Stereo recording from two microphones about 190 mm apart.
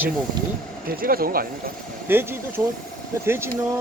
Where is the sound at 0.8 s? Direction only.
50° right (ahead or behind).